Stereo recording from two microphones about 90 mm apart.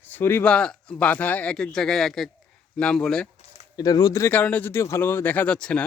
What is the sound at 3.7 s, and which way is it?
Speech, 45° left (ahead or behind).